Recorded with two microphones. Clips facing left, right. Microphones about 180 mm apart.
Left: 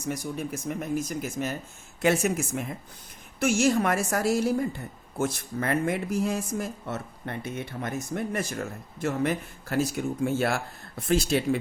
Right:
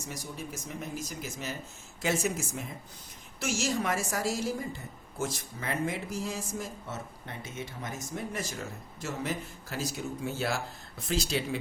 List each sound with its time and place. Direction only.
0.0 s speech: 55° left (ahead or behind)